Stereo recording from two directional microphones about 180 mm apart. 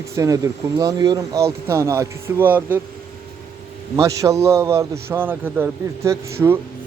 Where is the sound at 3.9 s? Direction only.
15° right (ahead or behind).